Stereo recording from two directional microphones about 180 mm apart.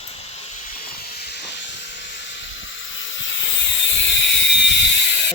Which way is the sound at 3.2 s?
90° left.